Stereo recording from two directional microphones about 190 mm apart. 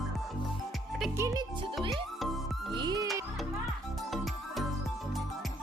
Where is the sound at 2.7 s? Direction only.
20° right (ahead or behind).